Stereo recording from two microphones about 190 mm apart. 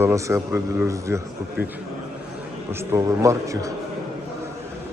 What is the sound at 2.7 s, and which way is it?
A man's voice, 15° right (ahead or behind).